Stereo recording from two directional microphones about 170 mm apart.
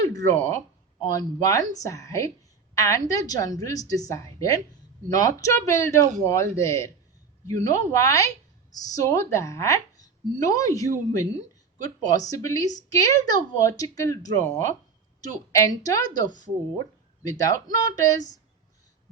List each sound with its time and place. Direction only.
0.0 s a sound: 20° left (ahead or behind)
1.0 s a woman's voice: 20° left (ahead or behind)
15.8 s a woman's voice: 20° left (ahead or behind)